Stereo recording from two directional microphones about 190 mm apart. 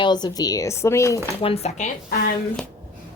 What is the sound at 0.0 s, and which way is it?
Speech, 20° left (ahead or behind).